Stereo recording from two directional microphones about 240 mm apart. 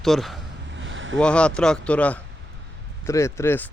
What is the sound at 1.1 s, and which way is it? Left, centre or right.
Speech, centre.